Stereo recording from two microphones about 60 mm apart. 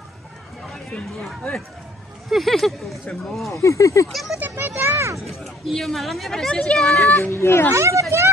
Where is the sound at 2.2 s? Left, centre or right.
Centre.